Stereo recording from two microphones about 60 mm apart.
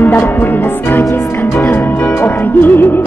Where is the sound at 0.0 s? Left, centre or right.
Left.